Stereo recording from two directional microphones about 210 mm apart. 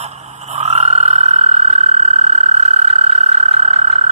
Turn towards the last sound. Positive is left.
turn(degrees=-30)  # may be behind; listen again after turning